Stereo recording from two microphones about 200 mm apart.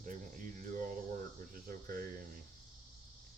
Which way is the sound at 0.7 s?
45° right (ahead or behind).